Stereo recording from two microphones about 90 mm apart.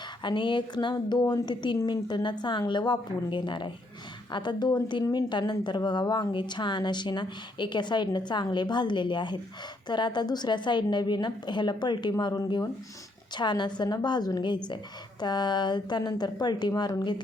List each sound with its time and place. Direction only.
0.2 s a woman's voice: 60° left (ahead or behind)